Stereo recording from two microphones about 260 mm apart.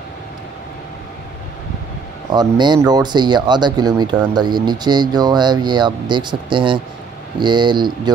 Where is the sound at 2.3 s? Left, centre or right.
Centre.